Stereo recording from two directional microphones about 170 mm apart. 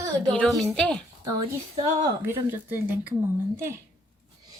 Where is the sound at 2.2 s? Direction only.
15° right (ahead or behind).